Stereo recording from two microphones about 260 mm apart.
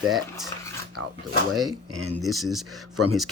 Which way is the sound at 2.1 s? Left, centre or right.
Centre.